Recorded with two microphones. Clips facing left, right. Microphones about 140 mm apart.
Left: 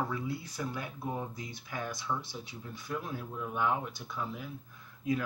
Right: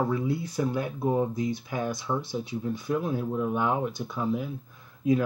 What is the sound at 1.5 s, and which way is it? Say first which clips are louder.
Speech: right 9 dB; 20° right (ahead or behind).